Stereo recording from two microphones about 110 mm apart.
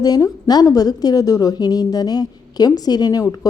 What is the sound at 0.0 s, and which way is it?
A woman's voice, 35° left (ahead or behind).